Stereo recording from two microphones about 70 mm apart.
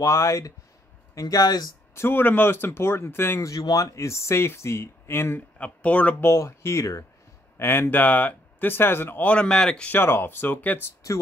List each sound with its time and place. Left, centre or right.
0.0 s speech: left
1.2 s speech: left
2.0 s speech: left
3.4 s speech: left
5.6 s speech: centre
6.2 s speech: left
7.5 s speech: left
9.2 s speech: centre
9.8 s speech: left